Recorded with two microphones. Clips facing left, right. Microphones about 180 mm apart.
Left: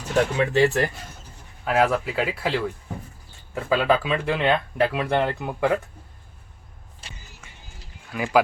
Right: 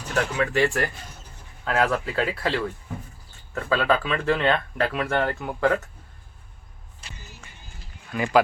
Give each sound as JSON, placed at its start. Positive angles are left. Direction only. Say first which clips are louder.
{"t": 0.1, "sound": "speech", "louder": "left 3 dB", "side_deg": 20}
{"t": 1.6, "sound": "speech", "louder": "left 2 dB", "side_deg": 10}
{"t": 3.5, "sound": "speech", "louder": "left 2 dB", "side_deg": 15}
{"t": 8.1, "sound": "speech", "louder": "right 1 dB", "side_deg": 5}